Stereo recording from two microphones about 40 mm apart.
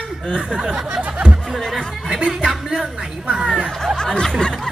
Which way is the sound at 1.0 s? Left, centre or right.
Right.